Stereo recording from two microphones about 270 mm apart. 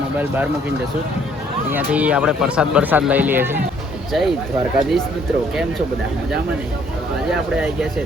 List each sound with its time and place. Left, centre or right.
1.7 s speech: centre
7.3 s speech: centre